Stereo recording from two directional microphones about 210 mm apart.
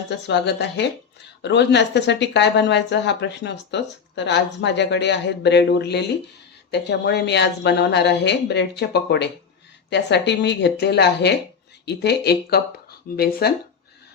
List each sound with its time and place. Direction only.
0.1 s a woman's voice: 55° left (ahead or behind)